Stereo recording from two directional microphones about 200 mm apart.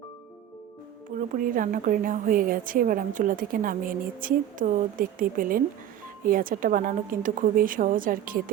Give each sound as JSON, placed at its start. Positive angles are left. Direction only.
{"t": 1.4, "sound": "a woman's voice", "side_deg": -45}